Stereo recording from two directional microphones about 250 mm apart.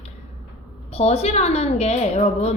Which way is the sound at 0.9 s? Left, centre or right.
Left.